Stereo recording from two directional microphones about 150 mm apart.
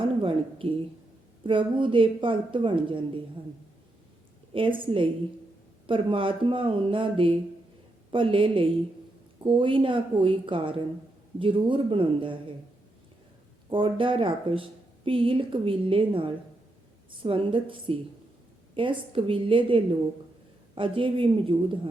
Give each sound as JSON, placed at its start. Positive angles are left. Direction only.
{"t": 0.2, "sound": "speech", "side_deg": -35}
{"t": 4.5, "sound": "speech", "side_deg": -35}
{"t": 13.7, "sound": "speech", "side_deg": -35}